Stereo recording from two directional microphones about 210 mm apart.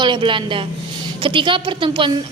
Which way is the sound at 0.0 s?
25° right (ahead or behind).